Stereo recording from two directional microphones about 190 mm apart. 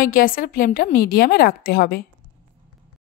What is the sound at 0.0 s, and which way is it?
Speech, 50° left (ahead or behind).